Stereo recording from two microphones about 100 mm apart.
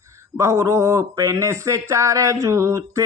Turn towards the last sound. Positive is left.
turn(degrees=-30)  # may be behind; listen again after turning